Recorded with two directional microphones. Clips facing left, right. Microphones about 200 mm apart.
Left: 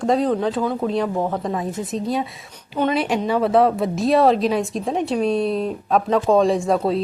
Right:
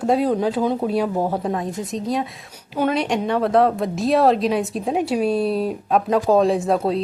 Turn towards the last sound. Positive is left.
turn(degrees=0)  # may be behind; listen again after turning